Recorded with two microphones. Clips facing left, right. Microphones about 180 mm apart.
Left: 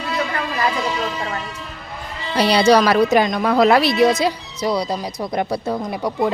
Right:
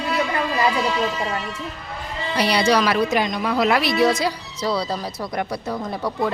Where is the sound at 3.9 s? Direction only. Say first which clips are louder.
Left 3 dB; 20° left (ahead or behind).